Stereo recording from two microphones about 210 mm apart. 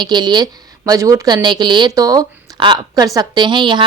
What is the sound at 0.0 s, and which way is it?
A woman's voice, 20° right (ahead or behind).